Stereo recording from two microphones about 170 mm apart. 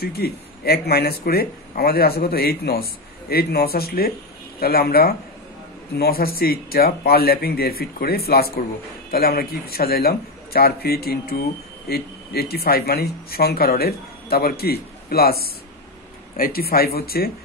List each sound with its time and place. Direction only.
0.0 s speech: 65° left (ahead or behind)